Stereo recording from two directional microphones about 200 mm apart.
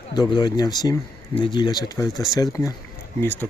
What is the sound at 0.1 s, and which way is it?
Speech, 20° left (ahead or behind).